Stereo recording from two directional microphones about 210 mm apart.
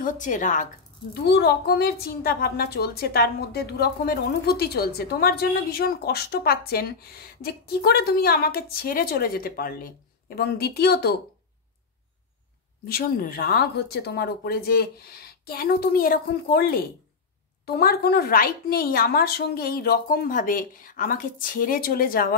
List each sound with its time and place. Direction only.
0.0 s speech: 40° left (ahead or behind)
1.2 s a woman's voice: 50° left (ahead or behind)
12.8 s a woman's voice: 45° left (ahead or behind)